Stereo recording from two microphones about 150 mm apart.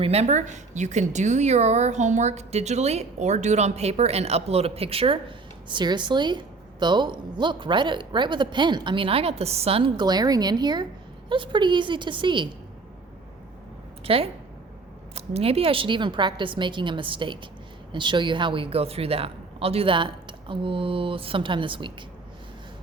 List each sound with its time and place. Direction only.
0.0 s a woman's voice: 45° right (ahead or behind)
14.0 s a woman's voice: 40° right (ahead or behind)